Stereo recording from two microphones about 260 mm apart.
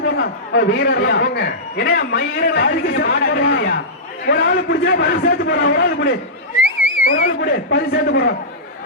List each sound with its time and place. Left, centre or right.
0.0 s a man's voice: left
3.4 s a sound: left
4.3 s a man's voice: left